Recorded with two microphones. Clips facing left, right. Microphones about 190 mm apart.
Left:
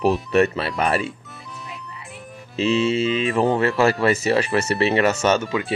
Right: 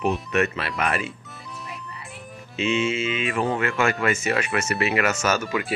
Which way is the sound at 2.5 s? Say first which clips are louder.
Left 4 dB; 35° left (ahead or behind).